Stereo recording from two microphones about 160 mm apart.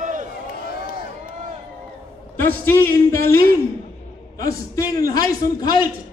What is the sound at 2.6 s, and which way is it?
Speech, 15° left (ahead or behind).